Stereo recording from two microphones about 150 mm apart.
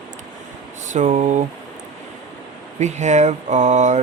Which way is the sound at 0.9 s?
55° right (ahead or behind).